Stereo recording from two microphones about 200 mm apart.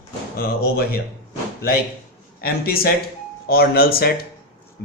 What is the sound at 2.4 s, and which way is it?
Speech, 50° left (ahead or behind).